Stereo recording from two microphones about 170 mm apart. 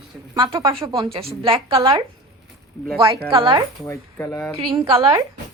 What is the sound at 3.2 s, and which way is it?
Speech, 30° right (ahead or behind).